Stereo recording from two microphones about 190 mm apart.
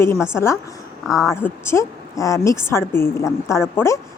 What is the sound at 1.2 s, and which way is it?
A woman's voice, 15° left (ahead or behind).